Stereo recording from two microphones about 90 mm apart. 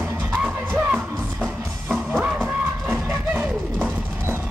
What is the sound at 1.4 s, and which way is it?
Music, 5° left (ahead or behind).